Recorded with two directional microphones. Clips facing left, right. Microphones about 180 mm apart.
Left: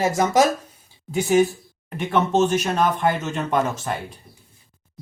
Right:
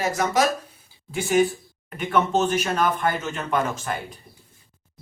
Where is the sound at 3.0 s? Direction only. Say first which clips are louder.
Left 3 dB; 20° left (ahead or behind).